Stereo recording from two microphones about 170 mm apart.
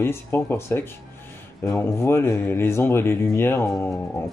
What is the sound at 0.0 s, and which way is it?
Speech, 15° left (ahead or behind).